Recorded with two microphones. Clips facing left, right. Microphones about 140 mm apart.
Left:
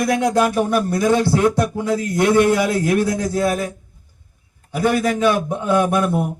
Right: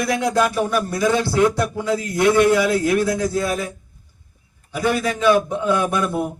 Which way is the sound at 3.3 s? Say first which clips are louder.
Left 3 dB; 50° left (ahead or behind).